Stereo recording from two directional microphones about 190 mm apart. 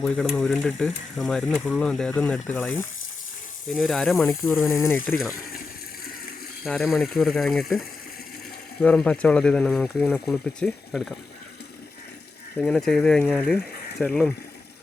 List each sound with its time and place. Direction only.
0.0 s speech: centre (ahead or behind)
4.3 s speech: 15° left (ahead or behind)
6.7 s speech: centre (ahead or behind)
12.5 s speech: 5° left (ahead or behind)